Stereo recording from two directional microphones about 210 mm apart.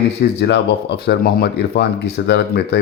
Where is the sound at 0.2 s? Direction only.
55° left (ahead or behind).